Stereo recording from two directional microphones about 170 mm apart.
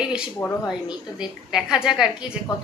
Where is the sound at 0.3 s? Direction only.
15° left (ahead or behind).